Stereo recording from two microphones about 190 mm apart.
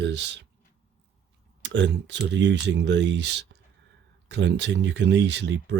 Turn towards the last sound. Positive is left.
turn(degrees=-65)  # may be behind; listen again after turning